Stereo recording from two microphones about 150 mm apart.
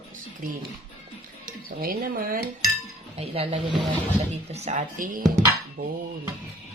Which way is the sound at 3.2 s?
40° right (ahead or behind).